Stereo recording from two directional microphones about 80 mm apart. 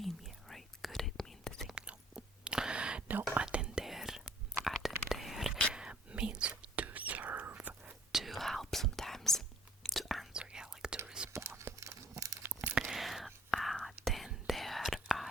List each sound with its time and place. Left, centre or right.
0.0 s whispering: centre
1.7 s whispering: centre
8.1 s whispering: centre
10.3 s whispering: centre
11.3 s a sound: right
12.8 s whispering: centre